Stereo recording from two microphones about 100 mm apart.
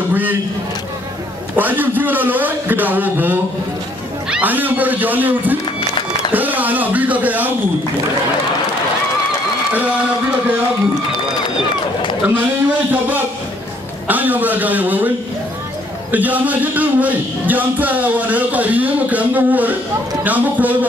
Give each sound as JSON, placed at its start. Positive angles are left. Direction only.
{"t": 0.1, "sound": "a man's voice", "side_deg": -20}
{"t": 1.6, "sound": "a man's voice", "side_deg": -20}
{"t": 12.9, "sound": "speech", "side_deg": -15}